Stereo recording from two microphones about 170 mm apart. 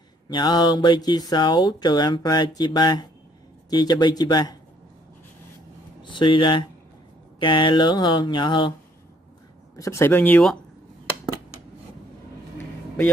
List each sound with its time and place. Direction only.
0.3 s speech: 25° left (ahead or behind)
6.0 s speech: 30° left (ahead or behind)
9.8 s speech: 15° left (ahead or behind)